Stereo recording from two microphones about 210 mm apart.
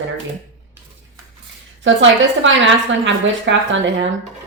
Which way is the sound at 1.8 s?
65° right (ahead or behind).